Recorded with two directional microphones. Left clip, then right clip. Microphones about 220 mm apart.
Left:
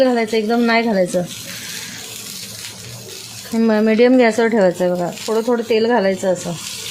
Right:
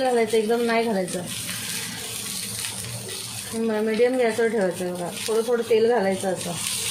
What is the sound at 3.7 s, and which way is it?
A woman's voice, 50° left (ahead or behind).